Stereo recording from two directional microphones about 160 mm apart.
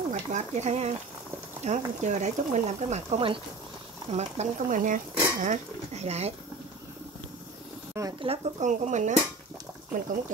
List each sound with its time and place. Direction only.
0.1 s speech: 45° right (ahead or behind)
8.2 s speech: 45° right (ahead or behind)